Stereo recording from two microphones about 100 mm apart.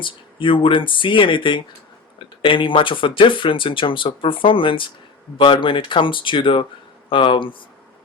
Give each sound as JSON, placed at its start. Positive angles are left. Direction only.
{"t": 0.0, "sound": "speech", "side_deg": 60}